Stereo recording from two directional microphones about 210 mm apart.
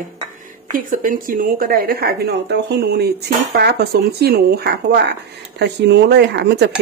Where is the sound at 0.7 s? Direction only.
40° right (ahead or behind).